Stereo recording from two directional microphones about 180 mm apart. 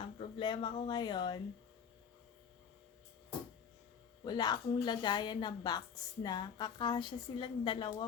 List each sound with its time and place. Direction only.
0.2 s a woman's voice: 30° left (ahead or behind)
4.2 s a woman's voice: 25° left (ahead or behind)